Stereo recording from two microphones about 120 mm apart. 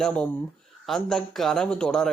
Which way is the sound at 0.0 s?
5° left (ahead or behind).